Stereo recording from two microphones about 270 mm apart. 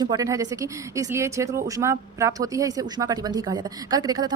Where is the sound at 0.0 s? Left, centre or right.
Centre.